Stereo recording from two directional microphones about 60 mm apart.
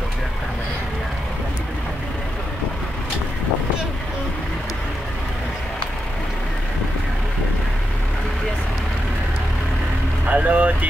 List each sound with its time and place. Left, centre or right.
10.2 s vehicle: right